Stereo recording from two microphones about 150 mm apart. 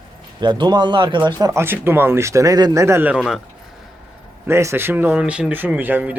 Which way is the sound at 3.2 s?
Centre (ahead or behind).